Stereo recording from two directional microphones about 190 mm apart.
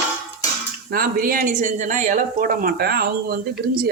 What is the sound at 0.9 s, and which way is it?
Speech, 50° right (ahead or behind).